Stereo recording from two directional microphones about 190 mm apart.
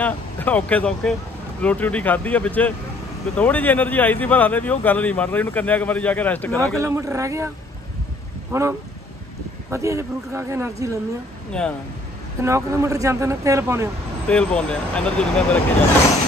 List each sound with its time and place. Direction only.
0.0 s speech: 10° left (ahead or behind)
6.8 s speech: 15° right (ahead or behind)
11.5 s speech: 5° left (ahead or behind)
12.4 s speech: 15° right (ahead or behind)
14.2 s speech: 5° left (ahead or behind)